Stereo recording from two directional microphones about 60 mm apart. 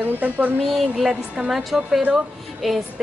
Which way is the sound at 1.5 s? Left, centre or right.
Centre.